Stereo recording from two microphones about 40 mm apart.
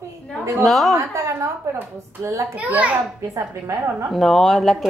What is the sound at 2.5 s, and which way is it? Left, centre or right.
Speech, right.